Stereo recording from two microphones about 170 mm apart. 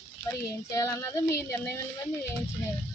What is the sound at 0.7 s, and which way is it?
Speech, 15° left (ahead or behind).